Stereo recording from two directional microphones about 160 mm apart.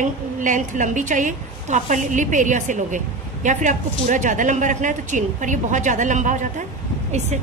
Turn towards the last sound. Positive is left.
turn(degrees=-45)  # may be behind; listen again after turning